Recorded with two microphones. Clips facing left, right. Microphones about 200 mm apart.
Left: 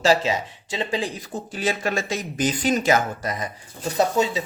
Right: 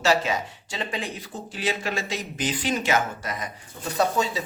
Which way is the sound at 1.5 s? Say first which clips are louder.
Left 3 dB; 45° left (ahead or behind).